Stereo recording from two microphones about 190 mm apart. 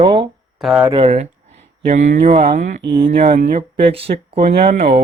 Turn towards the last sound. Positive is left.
turn(degrees=-30)  # may be behind; listen again after turning